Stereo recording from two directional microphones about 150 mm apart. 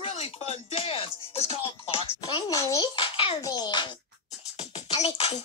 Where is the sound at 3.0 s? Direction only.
35° left (ahead or behind).